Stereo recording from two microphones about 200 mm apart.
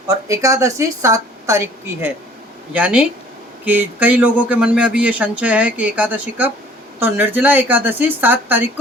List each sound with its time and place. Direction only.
0.1 s speech: 15° right (ahead or behind)